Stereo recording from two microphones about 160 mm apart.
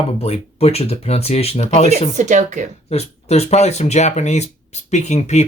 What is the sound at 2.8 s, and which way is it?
Speech, 40° left (ahead or behind).